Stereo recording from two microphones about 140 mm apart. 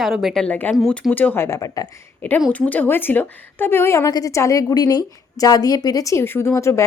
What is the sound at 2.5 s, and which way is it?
A woman's voice, 10° left (ahead or behind).